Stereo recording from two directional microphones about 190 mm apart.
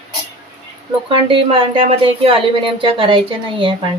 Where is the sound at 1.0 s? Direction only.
25° right (ahead or behind).